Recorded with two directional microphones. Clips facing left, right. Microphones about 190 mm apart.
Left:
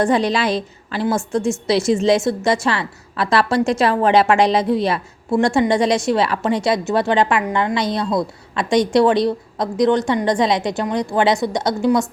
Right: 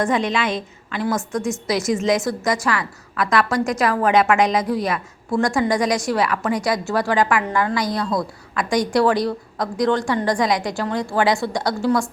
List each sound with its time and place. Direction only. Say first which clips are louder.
0.0 s a woman's voice: left 3 dB; 35° left (ahead or behind)